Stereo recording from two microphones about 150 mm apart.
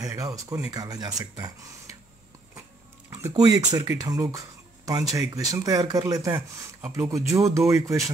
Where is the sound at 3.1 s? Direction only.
20° right (ahead or behind).